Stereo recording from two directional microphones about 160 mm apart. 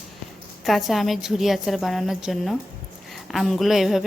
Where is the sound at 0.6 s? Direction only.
Centre (ahead or behind).